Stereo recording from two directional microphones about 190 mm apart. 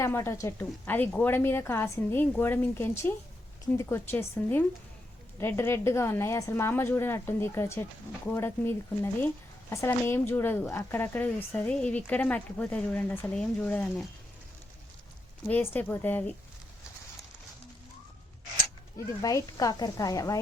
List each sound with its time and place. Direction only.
0.0 s a woman's voice: 15° left (ahead or behind)
15.4 s a woman's voice: 10° left (ahead or behind)
19.2 s a woman's voice: 20° left (ahead or behind)